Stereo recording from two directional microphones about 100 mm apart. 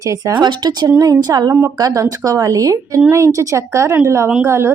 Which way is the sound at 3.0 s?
25° right (ahead or behind).